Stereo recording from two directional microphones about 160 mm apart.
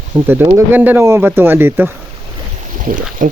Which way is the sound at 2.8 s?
55° right (ahead or behind).